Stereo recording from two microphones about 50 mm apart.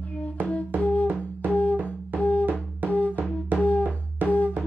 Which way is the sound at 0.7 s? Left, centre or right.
Left.